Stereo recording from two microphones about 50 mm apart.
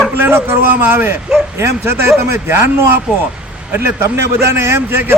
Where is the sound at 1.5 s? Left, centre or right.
Right.